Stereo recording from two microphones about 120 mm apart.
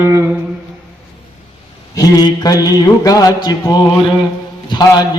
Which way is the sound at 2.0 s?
35° left (ahead or behind).